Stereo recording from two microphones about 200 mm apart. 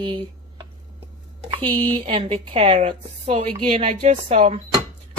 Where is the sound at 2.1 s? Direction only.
30° right (ahead or behind).